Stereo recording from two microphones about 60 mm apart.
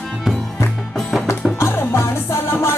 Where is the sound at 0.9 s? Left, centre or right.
Centre.